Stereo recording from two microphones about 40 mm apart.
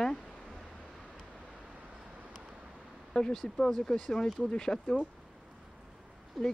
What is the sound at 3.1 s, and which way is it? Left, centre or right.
Speech, centre.